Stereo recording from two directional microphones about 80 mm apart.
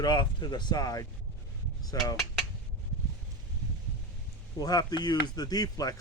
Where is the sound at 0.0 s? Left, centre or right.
Left.